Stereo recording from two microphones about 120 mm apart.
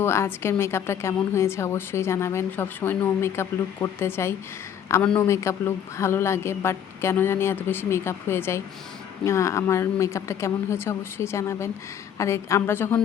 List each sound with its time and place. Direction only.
0.0 s a woman's voice: 20° left (ahead or behind)